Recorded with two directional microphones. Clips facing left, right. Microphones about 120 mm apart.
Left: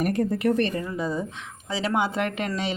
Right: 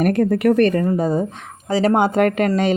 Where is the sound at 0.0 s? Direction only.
70° right (ahead or behind).